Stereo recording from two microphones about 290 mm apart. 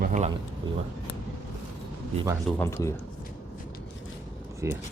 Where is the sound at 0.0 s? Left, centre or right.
Right.